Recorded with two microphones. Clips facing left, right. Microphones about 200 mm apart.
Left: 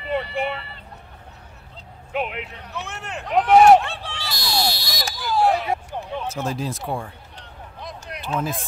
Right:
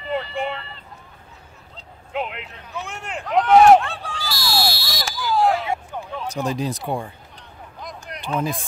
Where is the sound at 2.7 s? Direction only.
15° right (ahead or behind).